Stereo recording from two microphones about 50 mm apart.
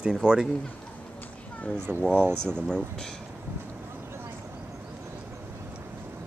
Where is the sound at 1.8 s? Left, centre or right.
Right.